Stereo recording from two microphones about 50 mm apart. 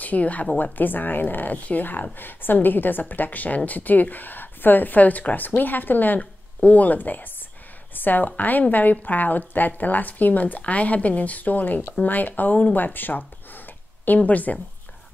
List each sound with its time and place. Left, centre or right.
0.0 s speech: left